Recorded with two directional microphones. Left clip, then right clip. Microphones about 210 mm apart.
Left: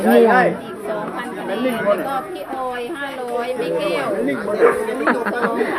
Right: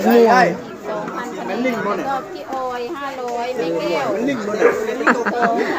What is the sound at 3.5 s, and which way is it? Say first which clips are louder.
Speech: even; 55° left (ahead or behind).